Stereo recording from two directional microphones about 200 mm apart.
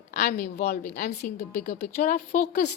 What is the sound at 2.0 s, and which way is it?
Speech, 40° left (ahead or behind).